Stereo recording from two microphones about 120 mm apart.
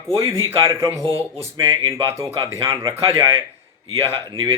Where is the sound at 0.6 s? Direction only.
25° right (ahead or behind).